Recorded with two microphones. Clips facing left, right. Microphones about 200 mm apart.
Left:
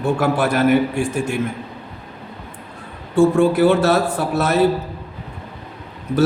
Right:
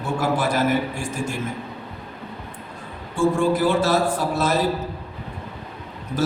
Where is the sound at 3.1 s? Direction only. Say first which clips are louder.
Left 6 dB; 65° left (ahead or behind).